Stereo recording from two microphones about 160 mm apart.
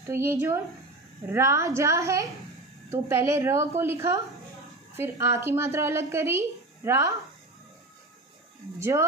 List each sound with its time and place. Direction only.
0.0 s a woman's voice: 15° right (ahead or behind)
8.7 s a woman's voice: 20° right (ahead or behind)